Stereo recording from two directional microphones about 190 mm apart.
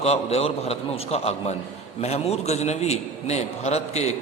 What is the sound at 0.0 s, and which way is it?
A man's voice, 35° left (ahead or behind).